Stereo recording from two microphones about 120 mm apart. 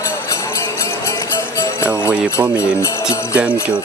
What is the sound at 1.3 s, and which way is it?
Music, 25° left (ahead or behind).